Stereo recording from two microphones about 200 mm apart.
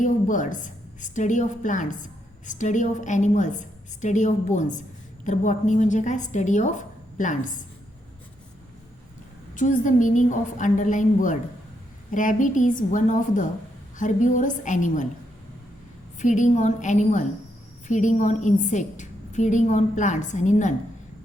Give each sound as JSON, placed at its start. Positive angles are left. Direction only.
{"t": 0.0, "sound": "a woman's voice", "side_deg": 40}
{"t": 9.6, "sound": "a woman's voice", "side_deg": 40}
{"t": 16.1, "sound": "a woman's voice", "side_deg": 40}